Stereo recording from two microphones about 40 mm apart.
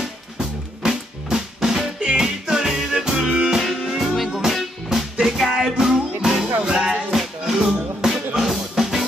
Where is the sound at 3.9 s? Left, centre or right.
Centre.